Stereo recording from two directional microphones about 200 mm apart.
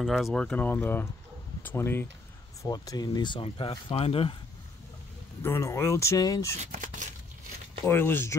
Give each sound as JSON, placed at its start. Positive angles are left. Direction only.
{"t": 0.0, "sound": "speech", "side_deg": 0}
{"t": 5.4, "sound": "speech", "side_deg": 15}
{"t": 6.6, "sound": "speech", "side_deg": -35}
{"t": 7.8, "sound": "speech", "side_deg": 10}